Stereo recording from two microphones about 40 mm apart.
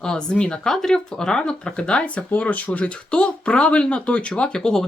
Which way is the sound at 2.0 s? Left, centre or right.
Left.